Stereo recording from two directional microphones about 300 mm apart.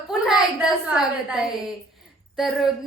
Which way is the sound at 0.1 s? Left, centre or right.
Centre.